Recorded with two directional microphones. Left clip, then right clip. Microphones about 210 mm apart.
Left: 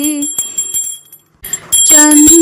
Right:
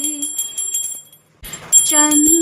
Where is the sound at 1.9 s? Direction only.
25° left (ahead or behind).